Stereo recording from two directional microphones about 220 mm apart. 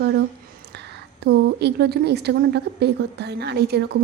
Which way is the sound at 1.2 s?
50° right (ahead or behind).